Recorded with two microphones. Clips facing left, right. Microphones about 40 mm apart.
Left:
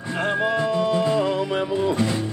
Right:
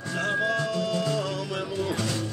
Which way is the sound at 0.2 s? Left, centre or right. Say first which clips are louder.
Left 4 dB; left.